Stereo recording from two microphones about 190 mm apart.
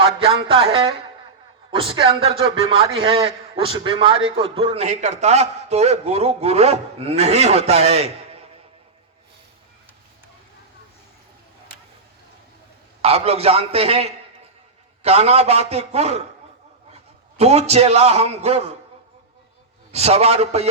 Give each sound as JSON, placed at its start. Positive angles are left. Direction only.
{"t": 0.0, "sound": "a man's voice", "side_deg": -30}
{"t": 13.0, "sound": "a man's voice", "side_deg": -30}
{"t": 19.9, "sound": "a man's voice", "side_deg": -35}